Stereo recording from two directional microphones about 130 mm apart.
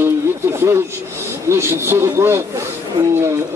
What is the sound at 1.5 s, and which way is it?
Speech, 20° right (ahead or behind).